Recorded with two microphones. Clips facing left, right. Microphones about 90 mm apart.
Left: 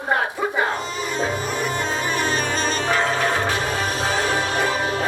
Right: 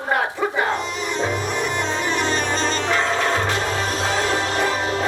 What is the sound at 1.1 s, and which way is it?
Music, 15° left (ahead or behind).